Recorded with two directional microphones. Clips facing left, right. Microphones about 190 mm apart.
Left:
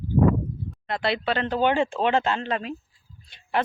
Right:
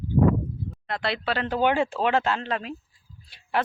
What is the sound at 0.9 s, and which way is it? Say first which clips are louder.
Speech: left 3 dB; centre (ahead or behind).